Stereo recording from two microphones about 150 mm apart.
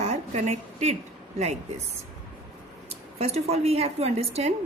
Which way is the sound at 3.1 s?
45° right (ahead or behind).